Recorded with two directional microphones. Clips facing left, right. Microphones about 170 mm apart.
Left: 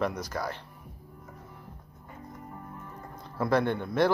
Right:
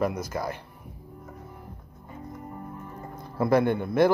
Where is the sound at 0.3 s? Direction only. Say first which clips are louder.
Right 2 dB; 10° right (ahead or behind).